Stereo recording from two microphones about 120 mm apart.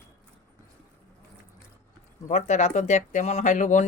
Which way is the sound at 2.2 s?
75° left (ahead or behind).